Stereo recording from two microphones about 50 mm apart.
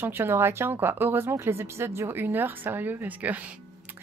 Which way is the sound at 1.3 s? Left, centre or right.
Right.